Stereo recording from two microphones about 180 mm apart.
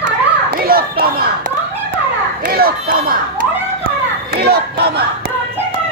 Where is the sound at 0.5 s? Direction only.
55° right (ahead or behind).